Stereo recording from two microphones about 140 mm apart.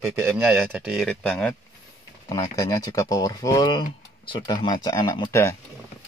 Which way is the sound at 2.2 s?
20° left (ahead or behind).